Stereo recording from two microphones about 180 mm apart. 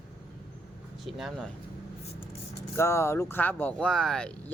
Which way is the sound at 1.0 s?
Centre (ahead or behind).